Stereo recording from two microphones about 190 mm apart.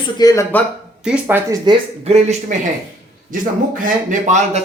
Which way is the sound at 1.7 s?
20° right (ahead or behind).